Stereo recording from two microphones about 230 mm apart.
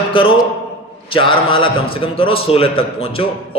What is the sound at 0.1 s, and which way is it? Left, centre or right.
A man's voice, left.